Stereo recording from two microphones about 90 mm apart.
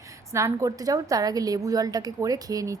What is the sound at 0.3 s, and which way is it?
A woman's voice, 35° right (ahead or behind).